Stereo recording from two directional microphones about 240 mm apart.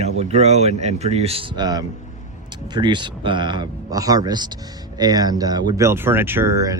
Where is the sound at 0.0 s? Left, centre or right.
Right.